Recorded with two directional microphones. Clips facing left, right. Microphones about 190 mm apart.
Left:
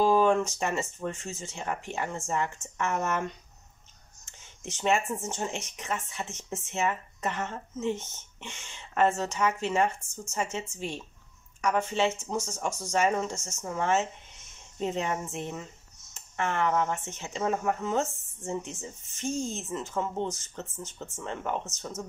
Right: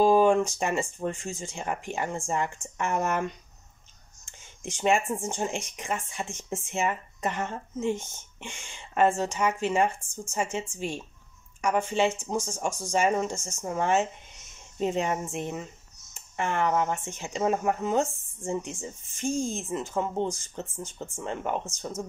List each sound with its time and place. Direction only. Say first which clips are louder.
0.0 s speech: right 3 dB; 10° right (ahead or behind)
0.8 s speech: right 3 dB; 30° right (ahead or behind)
1.1 s speech: right 3 dB; 10° right (ahead or behind)
4.3 s a sound: right 3 dB; 10° right (ahead or behind)
5.1 s speech: right 3 dB; 10° right (ahead or behind)
12.4 s speech: right 2 dB; 30° right (ahead or behind)
12.9 s speech: right 2 dB; 10° right (ahead or behind)